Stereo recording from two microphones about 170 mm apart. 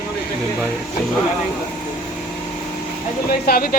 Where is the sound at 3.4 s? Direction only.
60° left (ahead or behind).